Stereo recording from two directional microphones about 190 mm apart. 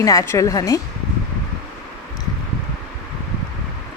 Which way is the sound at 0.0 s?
15° left (ahead or behind).